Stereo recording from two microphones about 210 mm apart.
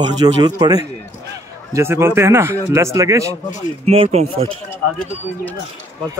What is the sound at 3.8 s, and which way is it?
Speech, 30° right (ahead or behind).